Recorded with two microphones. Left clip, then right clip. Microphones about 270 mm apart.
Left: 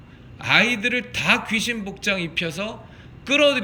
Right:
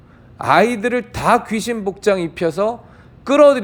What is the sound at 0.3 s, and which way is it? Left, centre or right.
A man's voice, centre.